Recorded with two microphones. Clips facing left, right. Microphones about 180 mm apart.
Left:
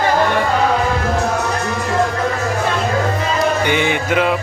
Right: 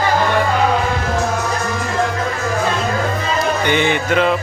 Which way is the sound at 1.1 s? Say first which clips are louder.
Left 1 dB; 65° left (ahead or behind).